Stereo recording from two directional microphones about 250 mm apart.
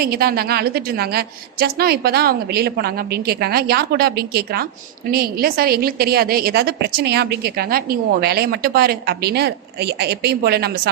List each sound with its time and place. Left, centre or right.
0.0 s a woman's voice: right